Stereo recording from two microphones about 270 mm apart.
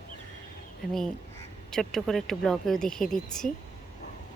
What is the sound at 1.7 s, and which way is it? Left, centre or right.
Speech, centre.